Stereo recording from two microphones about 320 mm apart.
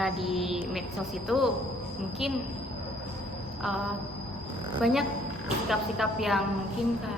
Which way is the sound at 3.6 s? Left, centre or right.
Centre.